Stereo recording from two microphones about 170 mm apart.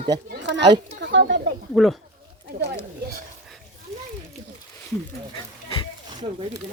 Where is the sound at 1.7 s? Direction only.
Centre (ahead or behind).